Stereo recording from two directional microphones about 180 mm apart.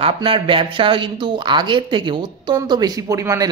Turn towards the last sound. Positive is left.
turn(degrees=-15)  # may be behind; listen again after turning